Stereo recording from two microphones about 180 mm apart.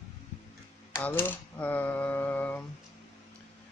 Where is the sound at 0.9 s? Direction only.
10° left (ahead or behind).